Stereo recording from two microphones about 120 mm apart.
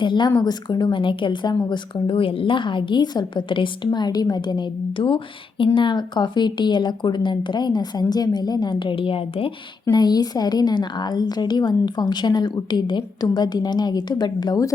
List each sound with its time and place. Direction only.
0.0 s a woman's voice: 40° left (ahead or behind)
9.9 s a woman's voice: 35° left (ahead or behind)